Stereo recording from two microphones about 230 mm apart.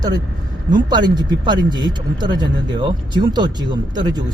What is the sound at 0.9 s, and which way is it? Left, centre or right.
Speech, centre.